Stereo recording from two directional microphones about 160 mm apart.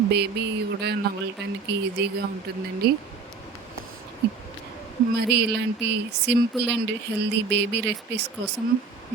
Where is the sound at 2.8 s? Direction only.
90° right.